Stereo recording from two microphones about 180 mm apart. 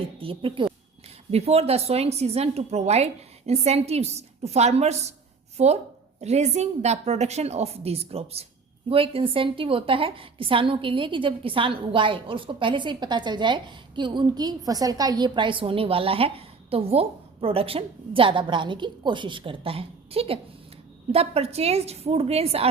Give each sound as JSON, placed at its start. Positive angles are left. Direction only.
{"t": 0.2, "sound": "a woman's voice", "side_deg": -30}